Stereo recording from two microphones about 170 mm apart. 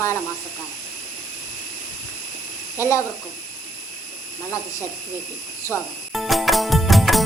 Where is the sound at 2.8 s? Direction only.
20° left (ahead or behind).